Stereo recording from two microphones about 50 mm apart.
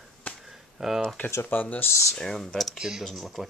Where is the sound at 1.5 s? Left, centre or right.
Left.